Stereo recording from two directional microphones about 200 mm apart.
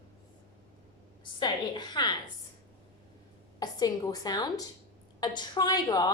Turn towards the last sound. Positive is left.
turn(degrees=20)  # may be behind; listen again after turning